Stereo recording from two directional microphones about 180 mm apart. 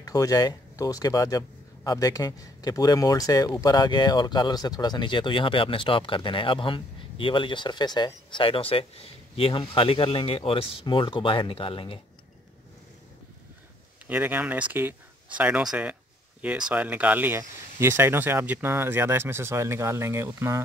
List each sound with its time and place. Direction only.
0.0 s speech: 20° left (ahead or behind)
14.0 s speech: 10° right (ahead or behind)